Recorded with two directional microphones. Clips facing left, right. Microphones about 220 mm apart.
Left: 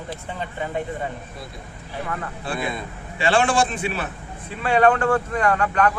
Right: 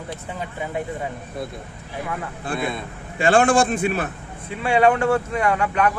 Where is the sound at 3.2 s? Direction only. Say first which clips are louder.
Right 3 dB; 50° right (ahead or behind).